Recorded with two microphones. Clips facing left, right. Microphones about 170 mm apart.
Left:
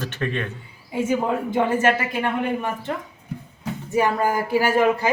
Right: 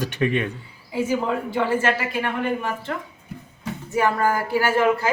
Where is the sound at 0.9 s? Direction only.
20° left (ahead or behind).